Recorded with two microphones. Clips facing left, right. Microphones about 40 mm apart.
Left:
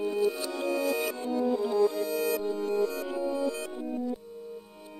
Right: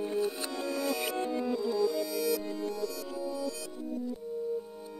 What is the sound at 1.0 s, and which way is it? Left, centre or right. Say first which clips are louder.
Music: left 1 dB; right.